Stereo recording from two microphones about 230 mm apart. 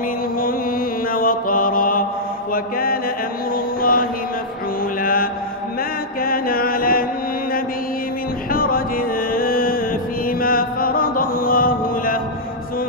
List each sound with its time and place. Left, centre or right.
0.4 s mantra: left
2.5 s chant: left
3.5 s mantra: left
6.2 s chant: left
8.5 s music: left